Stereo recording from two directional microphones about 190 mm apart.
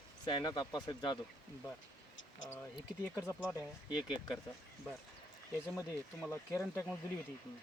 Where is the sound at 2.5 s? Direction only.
15° left (ahead or behind).